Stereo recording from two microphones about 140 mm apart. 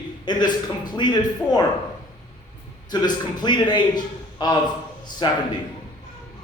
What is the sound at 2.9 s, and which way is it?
A man's voice, 30° left (ahead or behind).